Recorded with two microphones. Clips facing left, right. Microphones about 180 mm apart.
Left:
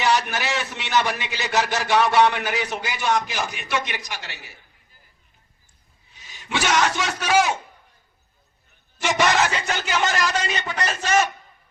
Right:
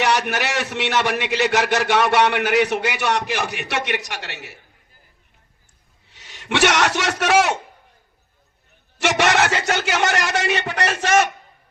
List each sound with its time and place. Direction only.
0.0 s a man's voice: 70° right (ahead or behind)
6.1 s a man's voice: 75° right (ahead or behind)
9.0 s a man's voice: 75° right (ahead or behind)